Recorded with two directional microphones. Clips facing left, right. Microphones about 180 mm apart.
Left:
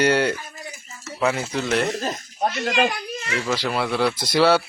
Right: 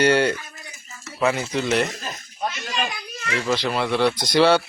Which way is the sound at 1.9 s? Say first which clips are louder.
Left 8 dB; 35° left (ahead or behind).